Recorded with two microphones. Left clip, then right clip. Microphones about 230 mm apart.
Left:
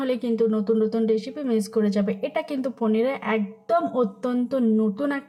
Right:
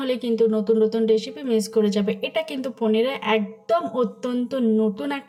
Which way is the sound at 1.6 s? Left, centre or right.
Centre.